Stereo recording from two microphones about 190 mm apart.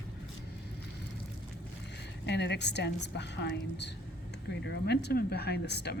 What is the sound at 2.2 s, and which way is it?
Speech, 65° left (ahead or behind).